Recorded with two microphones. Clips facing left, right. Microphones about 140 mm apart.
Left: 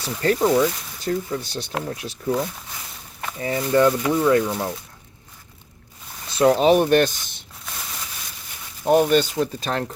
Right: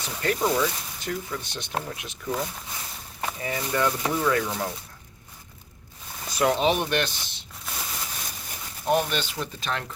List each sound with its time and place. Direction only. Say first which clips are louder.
0.0 s speech: left 6 dB; 35° left (ahead or behind)
3.4 s speech: left 8 dB; 30° left (ahead or behind)
4.4 s speech: left 4 dB; 15° left (ahead or behind)
6.3 s speech: left 7 dB; 35° left (ahead or behind)
8.9 s speech: left 8 dB; 45° left (ahead or behind)